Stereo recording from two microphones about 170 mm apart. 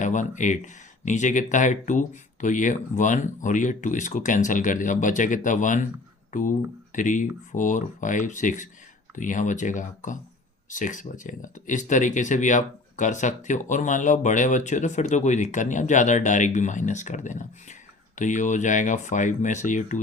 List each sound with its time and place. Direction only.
0.0 s speech: 45° left (ahead or behind)